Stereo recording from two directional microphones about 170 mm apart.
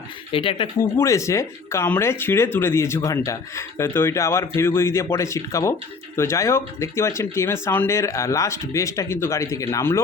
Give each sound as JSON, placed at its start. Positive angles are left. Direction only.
{"t": 0.3, "sound": "speech", "side_deg": 30}
{"t": 0.8, "sound": "speech", "side_deg": 15}